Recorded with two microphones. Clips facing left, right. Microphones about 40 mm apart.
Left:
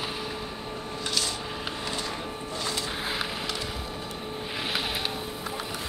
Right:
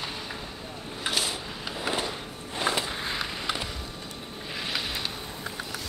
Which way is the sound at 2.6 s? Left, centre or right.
Right.